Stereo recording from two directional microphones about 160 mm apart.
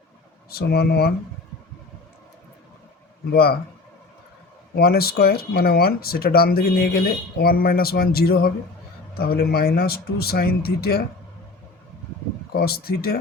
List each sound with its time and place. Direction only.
0.5 s speech: 80° left
3.3 s speech: 75° left (ahead or behind)
4.7 s speech: 75° left (ahead or behind)
12.5 s speech: 75° left (ahead or behind)